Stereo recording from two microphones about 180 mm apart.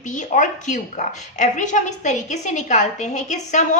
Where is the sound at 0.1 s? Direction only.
45° left (ahead or behind).